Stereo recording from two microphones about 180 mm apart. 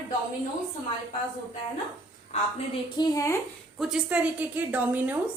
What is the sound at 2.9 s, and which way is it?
Speech, 20° left (ahead or behind).